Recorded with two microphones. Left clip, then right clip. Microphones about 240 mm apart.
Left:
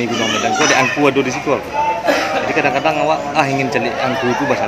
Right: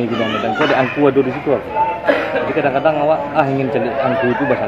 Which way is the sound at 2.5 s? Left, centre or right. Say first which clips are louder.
Right 1 dB; centre.